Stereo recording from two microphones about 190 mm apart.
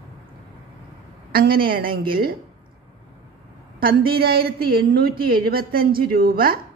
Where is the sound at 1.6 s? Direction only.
50° right (ahead or behind).